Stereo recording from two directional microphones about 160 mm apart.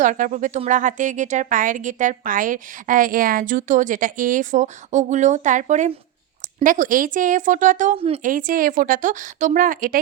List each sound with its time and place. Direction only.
0.0 s a woman's voice: 55° right (ahead or behind)
7.9 s a woman's voice: 40° right (ahead or behind)
8.2 s a woman's voice: 60° right (ahead or behind)